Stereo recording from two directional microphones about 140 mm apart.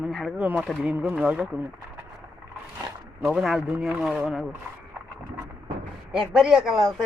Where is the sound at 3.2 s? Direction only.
Centre (ahead or behind).